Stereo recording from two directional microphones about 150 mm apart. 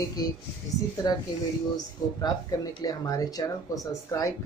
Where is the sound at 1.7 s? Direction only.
25° left (ahead or behind).